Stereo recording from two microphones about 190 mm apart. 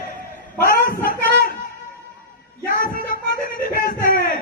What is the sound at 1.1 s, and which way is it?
Music, 50° left (ahead or behind).